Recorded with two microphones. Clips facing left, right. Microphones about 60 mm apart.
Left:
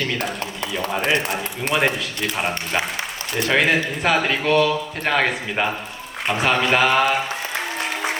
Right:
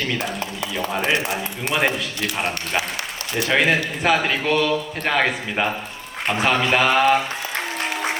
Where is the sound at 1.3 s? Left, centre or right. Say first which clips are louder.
Left 1 dB; centre.